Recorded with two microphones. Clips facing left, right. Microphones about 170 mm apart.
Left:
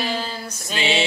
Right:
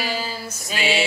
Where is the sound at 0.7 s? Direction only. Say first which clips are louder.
Even; 25° left (ahead or behind).